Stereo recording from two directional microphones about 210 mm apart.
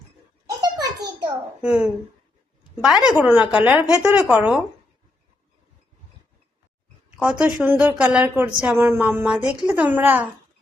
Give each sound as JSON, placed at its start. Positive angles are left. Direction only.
{"t": 0.4, "sound": "a sound", "side_deg": -20}
{"t": 1.6, "sound": "a woman's voice", "side_deg": -5}
{"t": 7.2, "sound": "a woman's voice", "side_deg": -5}